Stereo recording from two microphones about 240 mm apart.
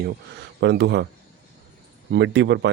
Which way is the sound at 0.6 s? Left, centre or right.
Right.